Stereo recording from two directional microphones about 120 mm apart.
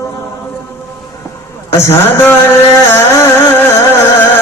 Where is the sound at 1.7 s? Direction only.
20° left (ahead or behind).